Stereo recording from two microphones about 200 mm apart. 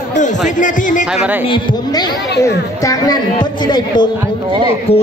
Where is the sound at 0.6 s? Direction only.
40° left (ahead or behind).